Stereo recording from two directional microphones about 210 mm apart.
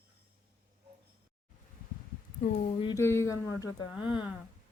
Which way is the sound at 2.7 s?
25° left (ahead or behind).